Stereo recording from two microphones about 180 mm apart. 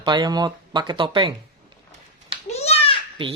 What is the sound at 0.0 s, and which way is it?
Speech, 25° right (ahead or behind).